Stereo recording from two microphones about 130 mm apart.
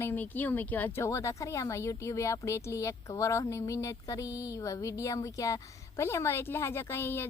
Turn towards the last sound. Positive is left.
turn(degrees=20)  # may be behind; listen again after turning